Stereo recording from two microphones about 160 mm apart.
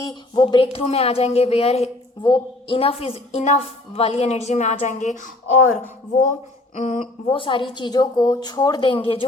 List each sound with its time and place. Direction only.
0.0 s speech: 30° left (ahead or behind); by 7.1 s 45° left (ahead or behind)
7.3 s a woman's voice: 30° left (ahead or behind)